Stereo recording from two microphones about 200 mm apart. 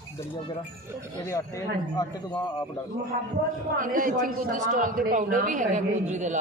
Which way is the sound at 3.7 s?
40° right (ahead or behind).